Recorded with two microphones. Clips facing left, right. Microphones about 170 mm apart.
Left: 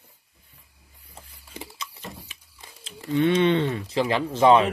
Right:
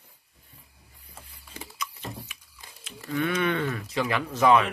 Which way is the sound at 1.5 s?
30° left (ahead or behind).